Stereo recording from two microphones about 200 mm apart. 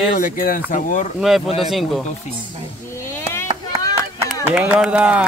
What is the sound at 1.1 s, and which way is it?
Speech, centre (ahead or behind).